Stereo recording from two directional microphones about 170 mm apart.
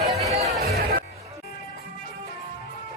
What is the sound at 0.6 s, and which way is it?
Music, 65° right (ahead or behind).